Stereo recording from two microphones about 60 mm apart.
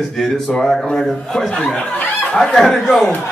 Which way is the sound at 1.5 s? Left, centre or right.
Centre.